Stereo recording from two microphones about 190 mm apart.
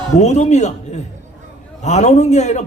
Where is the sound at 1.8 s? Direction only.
35° left (ahead or behind).